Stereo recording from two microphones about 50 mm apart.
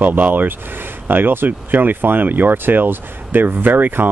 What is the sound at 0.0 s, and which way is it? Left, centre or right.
Speech, right.